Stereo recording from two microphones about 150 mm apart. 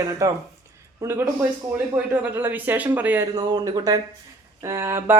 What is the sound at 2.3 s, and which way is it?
Speech, 10° right (ahead or behind).